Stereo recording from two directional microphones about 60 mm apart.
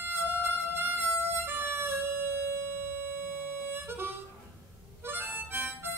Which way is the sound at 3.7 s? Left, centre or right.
Right.